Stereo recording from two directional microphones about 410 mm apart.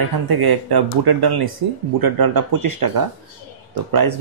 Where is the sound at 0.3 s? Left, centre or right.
Right.